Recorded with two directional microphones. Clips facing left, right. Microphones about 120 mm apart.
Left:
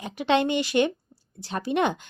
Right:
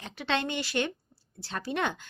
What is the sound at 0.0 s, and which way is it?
A woman's voice, 15° left (ahead or behind).